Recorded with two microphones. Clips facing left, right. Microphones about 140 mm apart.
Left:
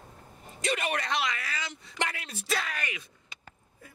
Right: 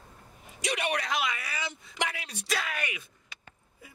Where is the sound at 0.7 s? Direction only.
Centre (ahead or behind).